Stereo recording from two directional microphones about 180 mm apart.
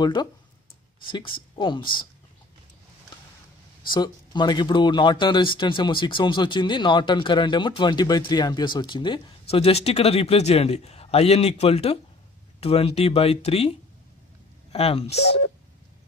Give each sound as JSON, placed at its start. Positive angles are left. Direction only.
{"t": 0.0, "sound": "speech", "side_deg": 25}
{"t": 3.9, "sound": "speech", "side_deg": 25}
{"t": 14.7, "sound": "speech", "side_deg": 35}
{"t": 15.1, "sound": "speech", "side_deg": 65}